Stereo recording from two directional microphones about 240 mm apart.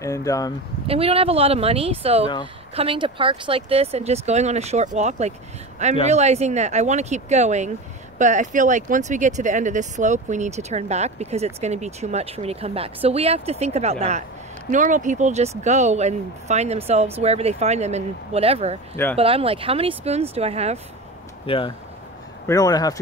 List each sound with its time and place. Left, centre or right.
0.0 s speech: centre
0.8 s speech: right
21.5 s speech: left